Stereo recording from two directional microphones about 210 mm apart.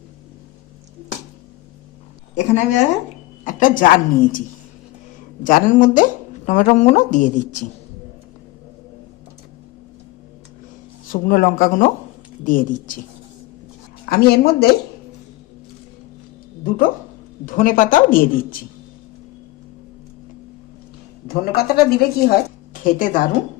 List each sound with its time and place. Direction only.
2.3 s speech: 35° left (ahead or behind)
11.1 s speech: 40° left (ahead or behind)
14.0 s speech: 45° left (ahead or behind)
16.6 s speech: 40° left (ahead or behind)
21.2 s a woman's voice: 45° left (ahead or behind)